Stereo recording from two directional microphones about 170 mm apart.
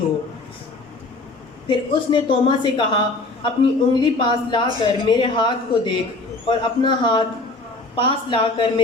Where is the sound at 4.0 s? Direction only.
25° left (ahead or behind).